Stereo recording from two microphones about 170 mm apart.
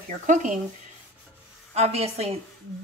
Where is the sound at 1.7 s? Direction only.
35° right (ahead or behind).